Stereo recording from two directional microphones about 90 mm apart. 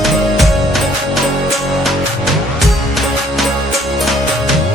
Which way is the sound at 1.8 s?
Centre (ahead or behind).